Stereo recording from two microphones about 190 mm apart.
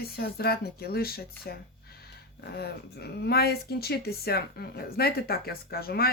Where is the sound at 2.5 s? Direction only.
55° left (ahead or behind).